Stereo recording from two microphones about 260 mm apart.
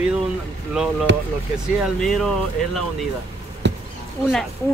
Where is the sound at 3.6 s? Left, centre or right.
Right.